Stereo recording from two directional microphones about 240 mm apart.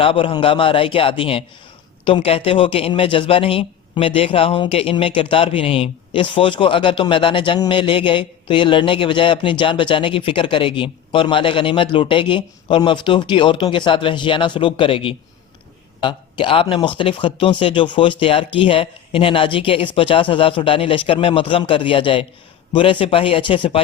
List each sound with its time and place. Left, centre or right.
0.0 s a man's voice: left